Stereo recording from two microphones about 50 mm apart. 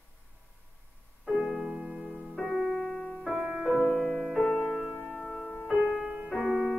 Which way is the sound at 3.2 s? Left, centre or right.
Centre.